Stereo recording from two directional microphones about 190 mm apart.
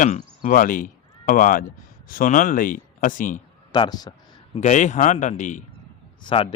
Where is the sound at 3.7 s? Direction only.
20° left (ahead or behind).